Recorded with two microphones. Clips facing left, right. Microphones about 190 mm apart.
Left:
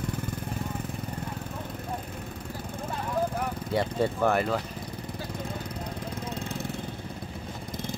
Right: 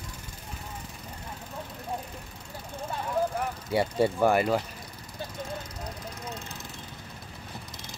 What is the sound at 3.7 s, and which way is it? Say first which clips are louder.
Speech: right 2 dB; 10° right (ahead or behind).